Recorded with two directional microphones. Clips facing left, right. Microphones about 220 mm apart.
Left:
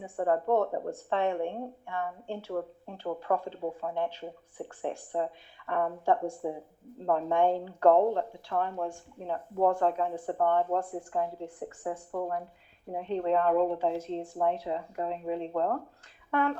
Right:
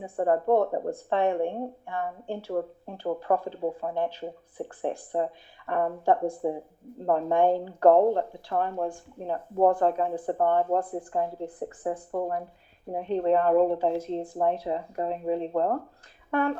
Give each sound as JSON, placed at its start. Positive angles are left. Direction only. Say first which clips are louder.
{"t": 0.0, "sound": "speech", "louder": "right 3 dB", "side_deg": -40}